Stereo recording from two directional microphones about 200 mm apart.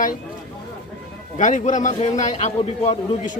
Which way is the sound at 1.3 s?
40° left (ahead or behind).